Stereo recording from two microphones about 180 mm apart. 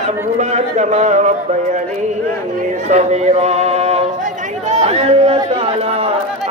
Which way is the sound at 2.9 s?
40° right (ahead or behind).